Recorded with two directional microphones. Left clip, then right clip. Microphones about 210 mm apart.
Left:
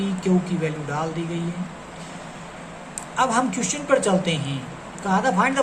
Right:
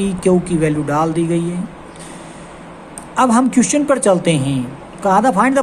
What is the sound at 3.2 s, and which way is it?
Speech, 55° right (ahead or behind).